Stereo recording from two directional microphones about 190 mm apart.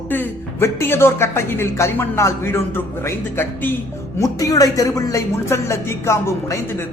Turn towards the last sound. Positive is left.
turn(degrees=15)  # may be behind; listen again after turning